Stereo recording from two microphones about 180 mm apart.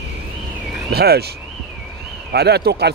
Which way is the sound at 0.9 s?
60° right (ahead or behind).